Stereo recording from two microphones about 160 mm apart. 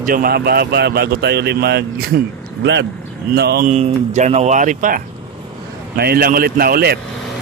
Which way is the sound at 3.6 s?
45° right (ahead or behind).